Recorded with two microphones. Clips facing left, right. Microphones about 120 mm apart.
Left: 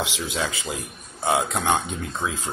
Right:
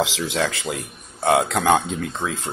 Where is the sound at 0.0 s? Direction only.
80° right.